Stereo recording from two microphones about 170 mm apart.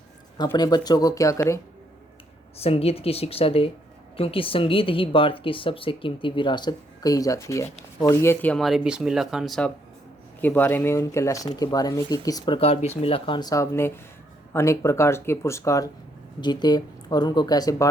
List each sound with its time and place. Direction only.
0.3 s speech: 25° left (ahead or behind)
2.6 s speech: 35° left (ahead or behind)
12.5 s speech: 35° left (ahead or behind)